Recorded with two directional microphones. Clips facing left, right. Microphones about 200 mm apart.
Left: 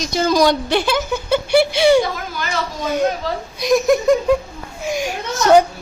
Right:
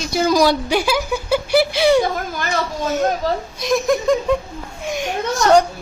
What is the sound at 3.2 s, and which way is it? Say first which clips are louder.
Speech: right 3 dB; 45° right (ahead or behind).